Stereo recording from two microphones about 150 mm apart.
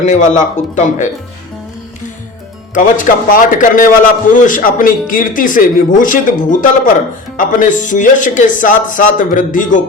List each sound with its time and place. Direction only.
0.0 s speech: 55° left (ahead or behind)
2.7 s a man's voice: 60° left (ahead or behind)